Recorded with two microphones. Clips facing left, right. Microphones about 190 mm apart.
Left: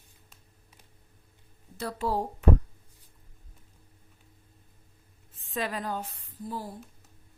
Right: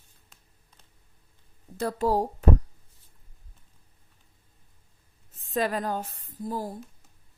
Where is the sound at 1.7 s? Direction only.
45° right (ahead or behind).